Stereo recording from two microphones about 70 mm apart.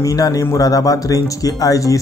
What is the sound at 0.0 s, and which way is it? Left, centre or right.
Speech, left.